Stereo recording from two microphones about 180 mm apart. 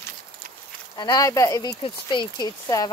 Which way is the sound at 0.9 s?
20° left (ahead or behind).